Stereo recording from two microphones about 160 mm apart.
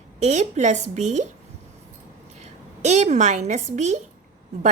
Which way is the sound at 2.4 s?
45° right (ahead or behind).